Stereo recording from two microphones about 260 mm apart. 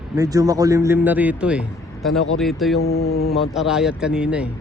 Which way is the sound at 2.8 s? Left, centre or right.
Left.